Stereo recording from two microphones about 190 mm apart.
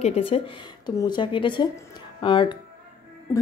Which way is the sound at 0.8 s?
25° left (ahead or behind).